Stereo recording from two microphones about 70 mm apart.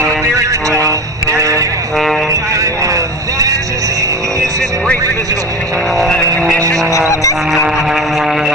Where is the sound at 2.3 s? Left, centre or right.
Right.